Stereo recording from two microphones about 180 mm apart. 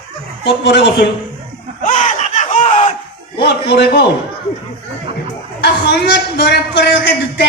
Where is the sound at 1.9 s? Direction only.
45° left (ahead or behind).